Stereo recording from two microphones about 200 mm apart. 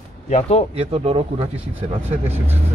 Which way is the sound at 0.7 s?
30° right (ahead or behind).